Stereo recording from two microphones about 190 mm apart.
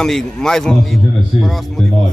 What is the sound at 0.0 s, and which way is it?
A man's voice, centre (ahead or behind).